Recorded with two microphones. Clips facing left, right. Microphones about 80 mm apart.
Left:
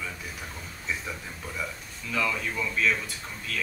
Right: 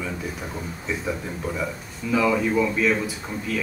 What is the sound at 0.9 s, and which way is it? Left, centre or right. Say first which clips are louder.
Speech: right 6 dB; centre.